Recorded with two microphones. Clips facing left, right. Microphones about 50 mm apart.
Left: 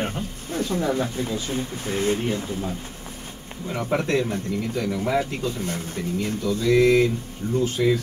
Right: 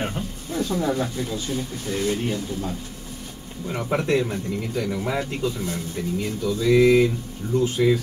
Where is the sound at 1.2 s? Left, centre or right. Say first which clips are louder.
Left 1 dB; left.